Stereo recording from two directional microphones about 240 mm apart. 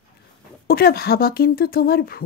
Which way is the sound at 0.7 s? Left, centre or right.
Left.